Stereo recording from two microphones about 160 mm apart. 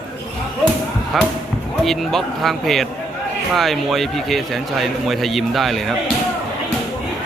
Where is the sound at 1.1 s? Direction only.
Centre (ahead or behind).